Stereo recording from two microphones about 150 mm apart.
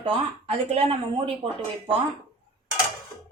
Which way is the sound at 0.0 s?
40° right (ahead or behind).